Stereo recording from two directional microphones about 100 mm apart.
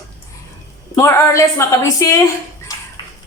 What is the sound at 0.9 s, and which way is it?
A woman's voice, 30° left (ahead or behind).